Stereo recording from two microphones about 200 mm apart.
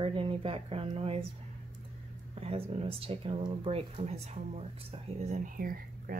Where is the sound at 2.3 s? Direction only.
30° right (ahead or behind).